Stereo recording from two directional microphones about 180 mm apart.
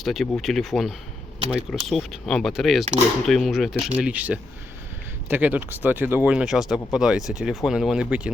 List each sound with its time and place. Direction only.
0.0 s speech: centre (ahead or behind)